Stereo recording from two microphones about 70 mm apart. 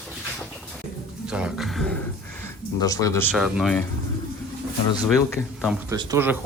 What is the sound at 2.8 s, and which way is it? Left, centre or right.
Speech, left.